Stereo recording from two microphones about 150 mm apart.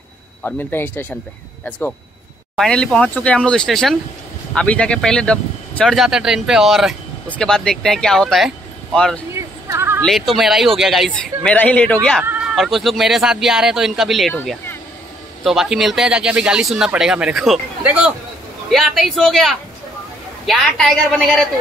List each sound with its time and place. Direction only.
0.4 s speech: 10° left (ahead or behind)
2.5 s speech: 5° left (ahead or behind)
9.3 s a sound: 20° right (ahead or behind)
10.0 s speech: centre (ahead or behind)
11.5 s speech: 10° left (ahead or behind)
12.2 s speech: 5° right (ahead or behind)
15.4 s speech: centre (ahead or behind)